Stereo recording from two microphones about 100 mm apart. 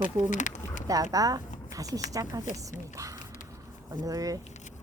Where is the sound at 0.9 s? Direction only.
35° right (ahead or behind).